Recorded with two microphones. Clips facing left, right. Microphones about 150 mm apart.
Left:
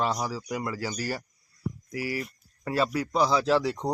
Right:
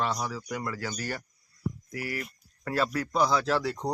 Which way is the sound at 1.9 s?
10° left (ahead or behind).